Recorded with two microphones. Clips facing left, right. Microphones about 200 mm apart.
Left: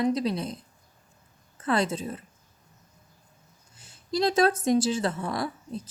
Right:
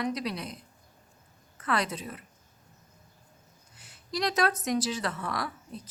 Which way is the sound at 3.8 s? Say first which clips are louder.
Left 6 dB; 25° left (ahead or behind).